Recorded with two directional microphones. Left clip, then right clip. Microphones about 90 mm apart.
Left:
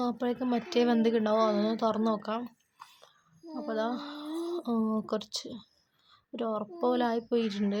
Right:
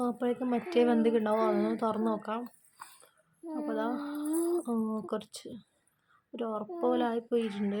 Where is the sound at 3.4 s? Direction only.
35° right (ahead or behind).